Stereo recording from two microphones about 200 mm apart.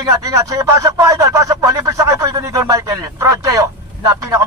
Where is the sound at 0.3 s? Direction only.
15° right (ahead or behind).